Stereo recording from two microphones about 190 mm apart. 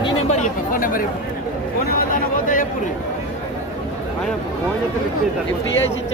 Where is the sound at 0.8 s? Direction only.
45° left (ahead or behind).